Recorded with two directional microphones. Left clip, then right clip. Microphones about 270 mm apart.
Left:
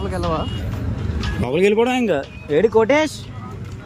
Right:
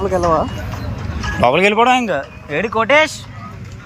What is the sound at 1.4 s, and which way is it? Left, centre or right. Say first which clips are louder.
Speech: right 5 dB; centre.